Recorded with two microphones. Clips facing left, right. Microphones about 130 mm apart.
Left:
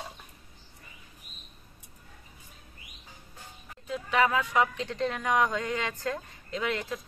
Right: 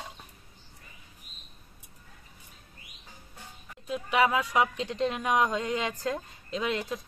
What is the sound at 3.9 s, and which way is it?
Speech, 15° right (ahead or behind).